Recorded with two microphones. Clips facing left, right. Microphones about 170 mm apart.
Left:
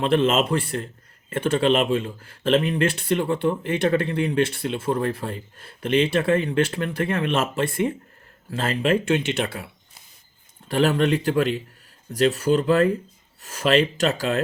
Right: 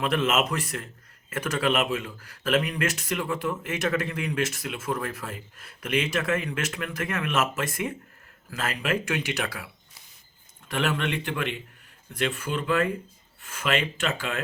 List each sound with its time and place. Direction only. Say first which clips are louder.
0.0 s speech: left 5 dB; 30° left (ahead or behind)
10.7 s speech: left 8 dB; 35° left (ahead or behind)